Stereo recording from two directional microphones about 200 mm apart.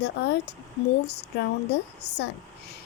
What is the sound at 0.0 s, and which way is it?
Speech, 55° left (ahead or behind).